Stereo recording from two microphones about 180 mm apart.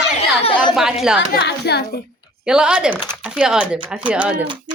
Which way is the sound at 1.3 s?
65° left (ahead or behind).